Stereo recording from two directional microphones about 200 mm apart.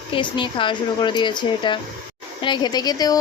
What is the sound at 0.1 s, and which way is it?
Speech, 25° left (ahead or behind).